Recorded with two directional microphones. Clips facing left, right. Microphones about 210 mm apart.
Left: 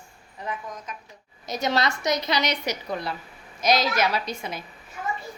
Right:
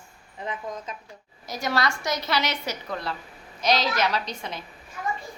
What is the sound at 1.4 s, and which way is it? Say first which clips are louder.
A woman's voice: left 2 dB; 20° left (ahead or behind).